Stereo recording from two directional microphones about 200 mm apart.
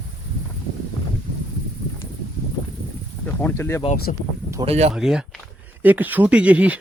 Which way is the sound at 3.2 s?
10° left (ahead or behind).